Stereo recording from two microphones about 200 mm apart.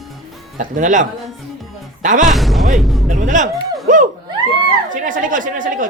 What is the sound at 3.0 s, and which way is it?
Speech, 40° right (ahead or behind).